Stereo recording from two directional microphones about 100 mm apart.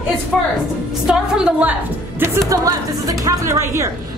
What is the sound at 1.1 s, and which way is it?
Speech, 10° right (ahead or behind).